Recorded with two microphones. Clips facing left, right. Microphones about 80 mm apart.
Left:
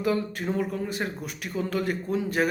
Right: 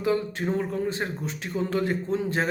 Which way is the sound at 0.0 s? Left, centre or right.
Right.